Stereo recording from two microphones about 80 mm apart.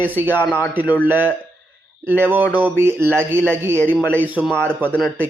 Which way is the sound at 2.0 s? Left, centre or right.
Right.